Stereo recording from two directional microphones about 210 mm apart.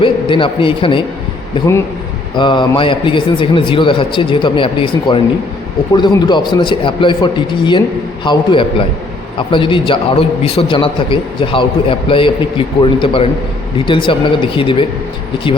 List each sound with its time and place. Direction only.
0.0 s a man's voice: 25° left (ahead or behind)
2.3 s a man's voice: 20° left (ahead or behind)